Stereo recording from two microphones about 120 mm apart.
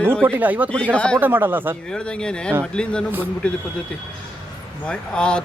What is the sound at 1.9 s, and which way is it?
Speech, 10° left (ahead or behind).